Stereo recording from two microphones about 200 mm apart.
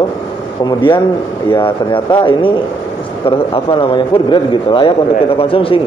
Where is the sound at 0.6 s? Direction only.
25° left (ahead or behind).